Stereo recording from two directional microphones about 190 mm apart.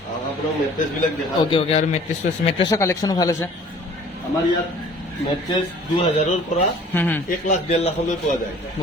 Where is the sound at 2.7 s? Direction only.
15° left (ahead or behind).